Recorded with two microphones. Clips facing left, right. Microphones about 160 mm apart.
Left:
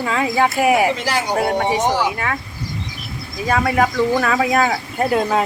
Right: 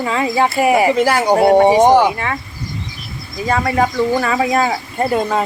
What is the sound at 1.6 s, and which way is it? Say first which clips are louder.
Speech: right 8 dB; 55° right (ahead or behind).